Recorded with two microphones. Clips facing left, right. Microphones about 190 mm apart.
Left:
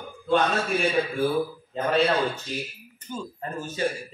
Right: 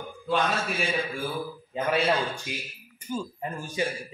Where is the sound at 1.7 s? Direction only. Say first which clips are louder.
Left 1 dB; 10° right (ahead or behind).